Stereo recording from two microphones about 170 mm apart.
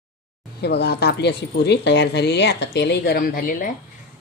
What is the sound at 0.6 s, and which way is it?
Speech, 75° left (ahead or behind).